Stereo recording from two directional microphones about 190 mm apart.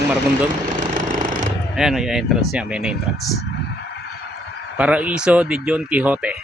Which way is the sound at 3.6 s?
65° left (ahead or behind).